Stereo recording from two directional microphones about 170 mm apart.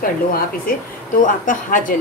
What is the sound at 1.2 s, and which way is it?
Speech, 50° left (ahead or behind).